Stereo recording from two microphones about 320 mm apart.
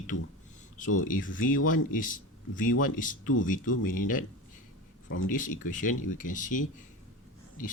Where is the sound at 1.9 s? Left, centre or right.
Left.